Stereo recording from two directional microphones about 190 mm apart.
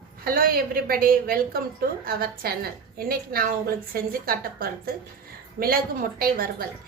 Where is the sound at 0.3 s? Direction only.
50° right (ahead or behind).